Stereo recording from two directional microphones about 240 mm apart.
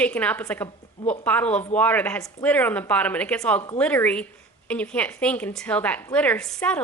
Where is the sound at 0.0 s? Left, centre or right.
Centre.